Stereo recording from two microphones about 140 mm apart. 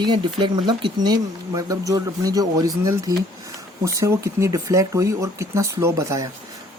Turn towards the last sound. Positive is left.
turn(degrees=-20)  # may be behind; listen again after turning